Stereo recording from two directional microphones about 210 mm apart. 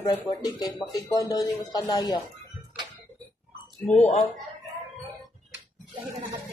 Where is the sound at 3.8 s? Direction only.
Centre (ahead or behind).